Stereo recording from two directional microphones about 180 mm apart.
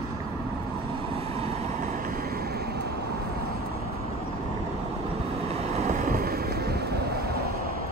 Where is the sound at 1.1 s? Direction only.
35° right (ahead or behind); by 2.7 s 60° right (ahead or behind).